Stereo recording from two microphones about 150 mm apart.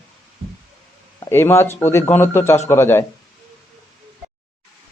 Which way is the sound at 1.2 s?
15° left (ahead or behind).